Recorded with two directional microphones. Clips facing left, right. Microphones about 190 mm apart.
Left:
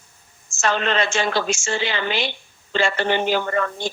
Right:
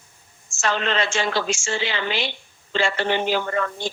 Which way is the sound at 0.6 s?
50° left (ahead or behind).